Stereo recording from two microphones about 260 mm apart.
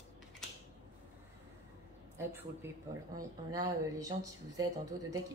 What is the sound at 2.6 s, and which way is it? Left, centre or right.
Speech, centre.